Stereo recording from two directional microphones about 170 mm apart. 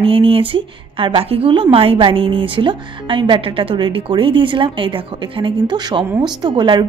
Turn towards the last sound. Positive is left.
turn(degrees=-25)  # may be behind; listen again after turning